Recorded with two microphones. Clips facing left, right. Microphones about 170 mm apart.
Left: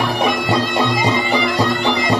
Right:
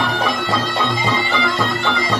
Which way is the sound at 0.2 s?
20° left (ahead or behind).